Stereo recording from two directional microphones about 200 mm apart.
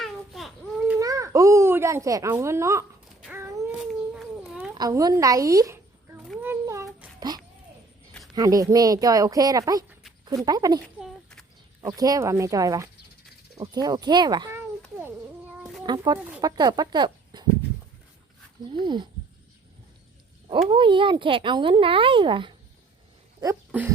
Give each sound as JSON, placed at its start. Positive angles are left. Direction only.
{"t": 0.0, "sound": "a sound", "side_deg": 0}
{"t": 0.9, "sound": "a child's voice", "side_deg": -15}
{"t": 3.2, "sound": "a sound", "side_deg": -10}
{"t": 3.8, "sound": "dog", "side_deg": 0}
{"t": 4.7, "sound": "a sound", "side_deg": -20}
{"t": 8.4, "sound": "a woman's voice", "side_deg": -15}
{"t": 11.0, "sound": "a sound", "side_deg": 5}
{"t": 11.8, "sound": "a woman's voice", "side_deg": -20}
{"t": 15.8, "sound": "speech", "side_deg": -20}
{"t": 18.7, "sound": "speech", "side_deg": -25}
{"t": 20.7, "sound": "speech", "side_deg": -25}
{"t": 23.4, "sound": "speech", "side_deg": -15}